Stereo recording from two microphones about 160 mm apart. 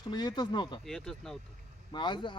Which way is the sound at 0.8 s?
Centre (ahead or behind).